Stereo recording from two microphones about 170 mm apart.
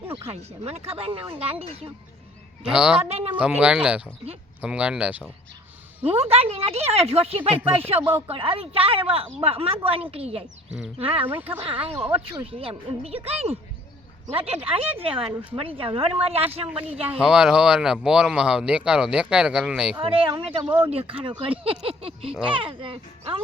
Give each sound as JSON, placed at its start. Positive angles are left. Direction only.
{"t": 0.1, "sound": "a woman's voice", "side_deg": -35}
{"t": 2.6, "sound": "speech", "side_deg": -5}
{"t": 3.1, "sound": "a woman's voice", "side_deg": -35}
{"t": 3.3, "sound": "speech", "side_deg": -10}
{"t": 6.1, "sound": "a woman's voice", "side_deg": -35}
{"t": 11.3, "sound": "speech", "side_deg": -10}
{"t": 11.6, "sound": "a woman's voice", "side_deg": -35}
{"t": 11.9, "sound": "speech", "side_deg": -10}
{"t": 12.5, "sound": "a woman's voice", "side_deg": -35}
{"t": 16.6, "sound": "speech", "side_deg": -5}
{"t": 20.0, "sound": "a woman's voice", "side_deg": -30}
{"t": 20.7, "sound": "speech", "side_deg": -10}
{"t": 20.9, "sound": "a woman's voice", "side_deg": -35}